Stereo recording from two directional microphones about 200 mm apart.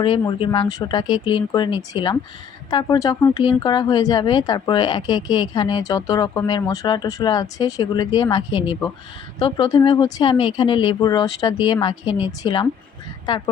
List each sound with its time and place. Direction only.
0.0 s speech: 25° left (ahead or behind)